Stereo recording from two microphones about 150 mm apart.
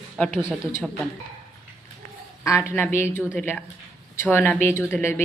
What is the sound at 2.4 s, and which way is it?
A woman's voice, 20° left (ahead or behind).